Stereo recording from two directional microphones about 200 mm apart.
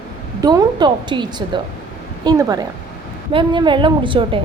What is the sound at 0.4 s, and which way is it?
Speech, 20° right (ahead or behind).